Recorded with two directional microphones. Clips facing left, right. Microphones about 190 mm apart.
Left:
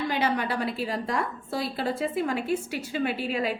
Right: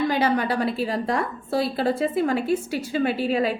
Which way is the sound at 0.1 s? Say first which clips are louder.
Right 5 dB; 40° right (ahead or behind).